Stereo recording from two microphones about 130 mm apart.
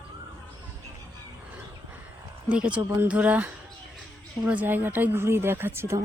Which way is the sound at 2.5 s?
10° right (ahead or behind).